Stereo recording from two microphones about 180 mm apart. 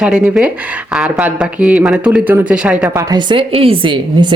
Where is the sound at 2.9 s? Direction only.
25° right (ahead or behind).